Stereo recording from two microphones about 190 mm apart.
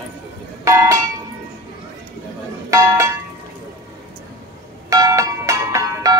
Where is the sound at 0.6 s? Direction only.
15° right (ahead or behind).